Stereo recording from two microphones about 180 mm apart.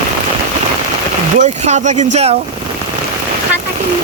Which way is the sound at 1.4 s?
40° right (ahead or behind).